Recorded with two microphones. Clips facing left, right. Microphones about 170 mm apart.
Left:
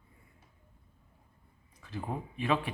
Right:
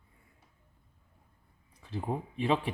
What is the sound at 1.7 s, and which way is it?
Speech, 30° right (ahead or behind).